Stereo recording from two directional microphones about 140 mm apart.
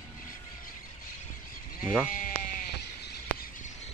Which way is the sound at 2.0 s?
70° left (ahead or behind).